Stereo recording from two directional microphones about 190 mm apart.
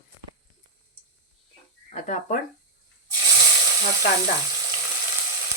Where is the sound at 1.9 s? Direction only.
40° left (ahead or behind).